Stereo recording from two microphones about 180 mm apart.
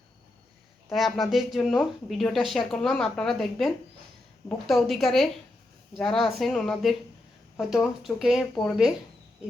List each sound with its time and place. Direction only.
0.9 s speech: centre (ahead or behind)